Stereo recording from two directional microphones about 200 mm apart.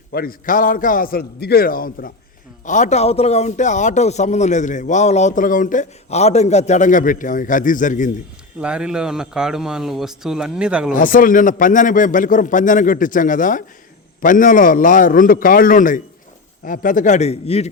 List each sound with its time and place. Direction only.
0.1 s a man's voice: 45° left (ahead or behind)
8.5 s a man's voice: 5° right (ahead or behind)
10.9 s a man's voice: 45° left (ahead or behind)